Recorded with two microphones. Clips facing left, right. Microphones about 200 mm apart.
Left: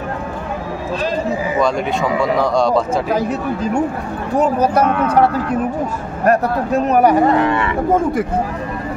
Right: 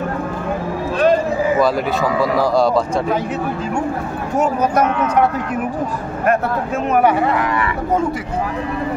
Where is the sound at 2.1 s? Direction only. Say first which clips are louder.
Even; centre (ahead or behind).